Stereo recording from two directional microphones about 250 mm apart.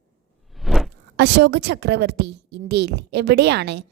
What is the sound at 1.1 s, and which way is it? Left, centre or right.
A woman's voice, right.